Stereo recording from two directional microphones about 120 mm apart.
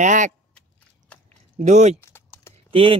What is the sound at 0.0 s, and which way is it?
Speech, 90° right.